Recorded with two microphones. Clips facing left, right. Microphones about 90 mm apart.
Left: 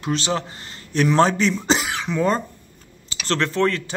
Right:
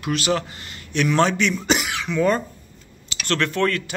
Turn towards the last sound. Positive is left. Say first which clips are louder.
# left 1 dB
turn(degrees=30)  # may be behind; listen again after turning